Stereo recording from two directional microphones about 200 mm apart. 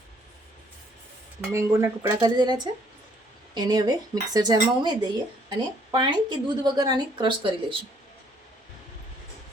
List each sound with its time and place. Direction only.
1.5 s speech: 15° right (ahead or behind)